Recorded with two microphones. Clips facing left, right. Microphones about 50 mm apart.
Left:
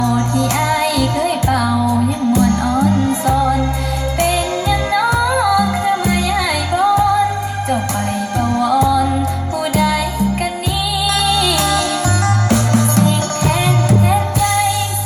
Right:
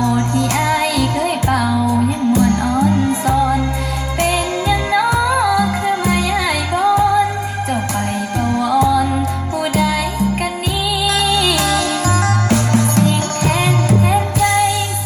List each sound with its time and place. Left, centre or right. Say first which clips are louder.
0.5 s music: even; right
3.3 s music: even; right
8.4 s music: left 1 dB; right
11.0 s music: even; right
14.1 s music: right 1 dB; right